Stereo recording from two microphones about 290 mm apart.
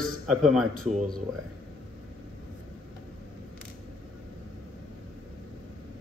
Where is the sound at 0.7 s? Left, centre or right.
Right.